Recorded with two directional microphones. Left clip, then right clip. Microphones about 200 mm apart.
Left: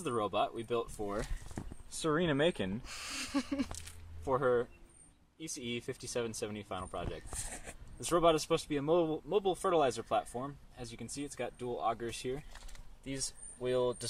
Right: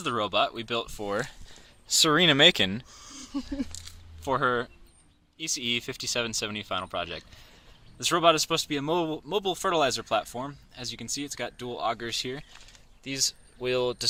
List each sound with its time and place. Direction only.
0.0 s speech: 15° right (ahead or behind)
2.8 s speech: 35° left (ahead or behind)
3.7 s speech: 15° left (ahead or behind)
4.2 s speech: 15° right (ahead or behind)
13.6 s speech: 15° right (ahead or behind)